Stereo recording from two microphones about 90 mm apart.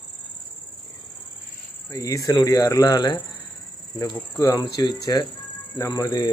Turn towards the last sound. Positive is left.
turn(degrees=35)  # may be behind; listen again after turning